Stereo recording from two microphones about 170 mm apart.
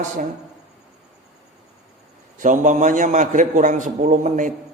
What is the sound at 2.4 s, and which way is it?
A man's voice, 50° right (ahead or behind).